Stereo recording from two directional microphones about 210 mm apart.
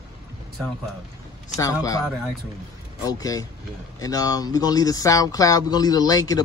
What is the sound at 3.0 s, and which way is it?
Speech, 15° left (ahead or behind).